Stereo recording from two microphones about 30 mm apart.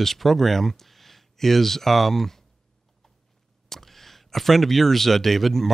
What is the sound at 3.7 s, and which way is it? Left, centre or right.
Speech, centre.